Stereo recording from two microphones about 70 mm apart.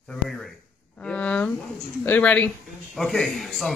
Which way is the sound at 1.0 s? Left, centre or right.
Centre.